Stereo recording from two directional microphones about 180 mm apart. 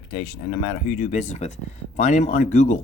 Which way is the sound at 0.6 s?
40° left (ahead or behind).